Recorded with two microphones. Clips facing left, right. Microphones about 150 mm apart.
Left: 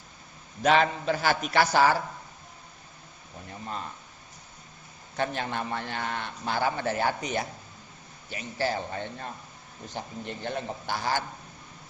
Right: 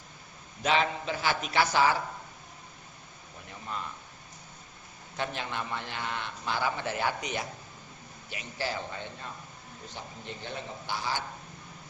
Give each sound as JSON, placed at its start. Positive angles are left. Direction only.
{"t": 0.6, "sound": "a man's voice", "side_deg": 50}
{"t": 5.1, "sound": "a man's voice", "side_deg": 45}